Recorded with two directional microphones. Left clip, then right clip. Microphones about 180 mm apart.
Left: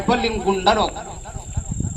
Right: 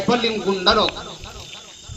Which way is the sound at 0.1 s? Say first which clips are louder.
Left 1 dB; 5° left (ahead or behind).